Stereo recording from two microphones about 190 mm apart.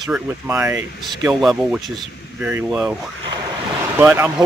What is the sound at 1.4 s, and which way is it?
Speech, centre (ahead or behind).